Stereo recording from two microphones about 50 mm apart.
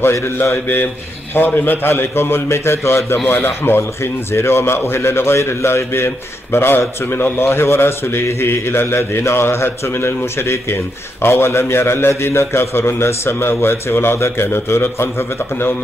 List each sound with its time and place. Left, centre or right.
0.1 s a man's voice: left
1.3 s a man's voice: left
3.3 s a man's voice: left
14.1 s a man's voice: left